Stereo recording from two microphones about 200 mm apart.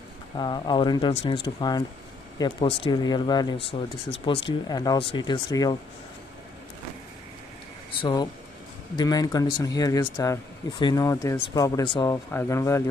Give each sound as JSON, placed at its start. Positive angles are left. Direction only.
{"t": 0.4, "sound": "speech", "side_deg": 20}
{"t": 8.0, "sound": "speech", "side_deg": 20}